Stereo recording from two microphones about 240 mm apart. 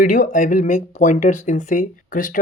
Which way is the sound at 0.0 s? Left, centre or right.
Left.